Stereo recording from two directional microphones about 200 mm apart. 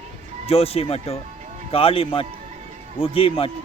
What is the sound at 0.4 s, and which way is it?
Speech, 30° left (ahead or behind).